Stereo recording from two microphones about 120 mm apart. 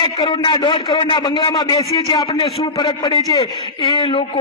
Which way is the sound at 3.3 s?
35° left (ahead or behind).